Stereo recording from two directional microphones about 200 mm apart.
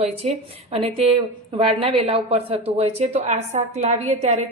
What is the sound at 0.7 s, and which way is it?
A woman's voice, 30° right (ahead or behind).